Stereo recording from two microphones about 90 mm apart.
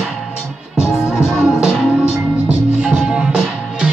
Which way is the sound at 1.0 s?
5° right (ahead or behind).